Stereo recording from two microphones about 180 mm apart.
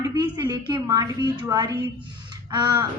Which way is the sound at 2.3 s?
25° right (ahead or behind).